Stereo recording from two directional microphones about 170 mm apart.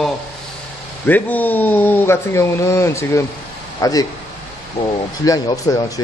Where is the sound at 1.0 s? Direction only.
10° left (ahead or behind).